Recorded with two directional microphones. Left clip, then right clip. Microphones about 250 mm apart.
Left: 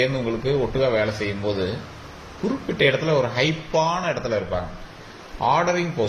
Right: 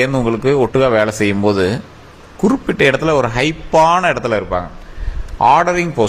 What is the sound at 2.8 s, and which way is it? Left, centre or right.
A man's voice, right.